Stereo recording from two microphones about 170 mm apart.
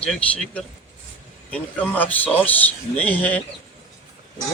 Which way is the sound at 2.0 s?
10° left (ahead or behind).